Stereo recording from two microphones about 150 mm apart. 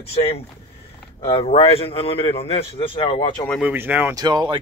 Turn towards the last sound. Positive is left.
turn(degrees=-30)  # may be behind; listen again after turning